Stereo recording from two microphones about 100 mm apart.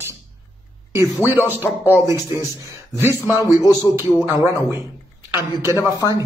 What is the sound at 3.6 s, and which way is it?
Speech, 35° left (ahead or behind).